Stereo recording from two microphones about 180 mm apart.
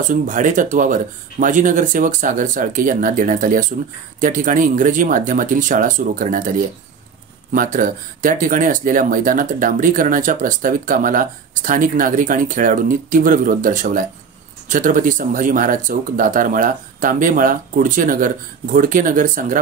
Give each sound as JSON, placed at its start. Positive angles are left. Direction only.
{"t": 0.1, "sound": "speech", "side_deg": -45}
{"t": 7.5, "sound": "speech", "side_deg": -50}